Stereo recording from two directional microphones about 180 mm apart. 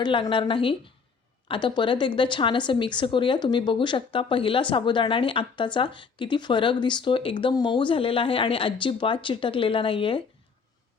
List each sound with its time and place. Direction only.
0.0 s speech: 30° left (ahead or behind)